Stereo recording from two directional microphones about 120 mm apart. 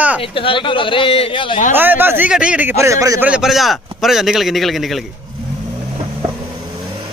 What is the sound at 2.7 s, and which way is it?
Speech, 25° right (ahead or behind).